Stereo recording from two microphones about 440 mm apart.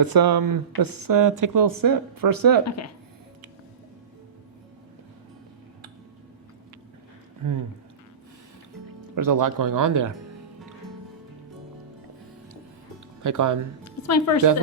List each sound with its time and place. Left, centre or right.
0.0 s speech: right
2.6 s speech: left
7.4 s speech: right
9.1 s speech: right
13.2 s speech: right
13.8 s a woman's voice: left